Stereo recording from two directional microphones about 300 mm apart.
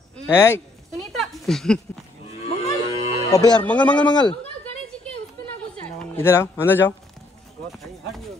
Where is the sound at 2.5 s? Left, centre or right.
Centre.